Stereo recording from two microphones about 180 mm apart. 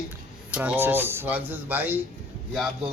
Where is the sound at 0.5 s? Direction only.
10° right (ahead or behind).